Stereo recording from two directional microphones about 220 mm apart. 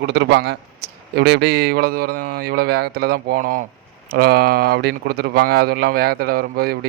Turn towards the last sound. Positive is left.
turn(degrees=-45)  # may be behind; listen again after turning